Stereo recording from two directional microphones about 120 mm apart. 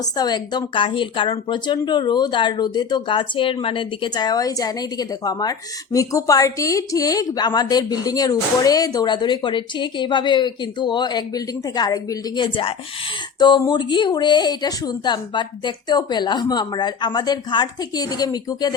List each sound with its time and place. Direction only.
0.2 s speech: 35° left (ahead or behind)